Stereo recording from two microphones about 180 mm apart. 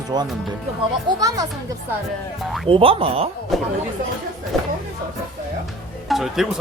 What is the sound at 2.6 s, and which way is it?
Speech, 30° right (ahead or behind).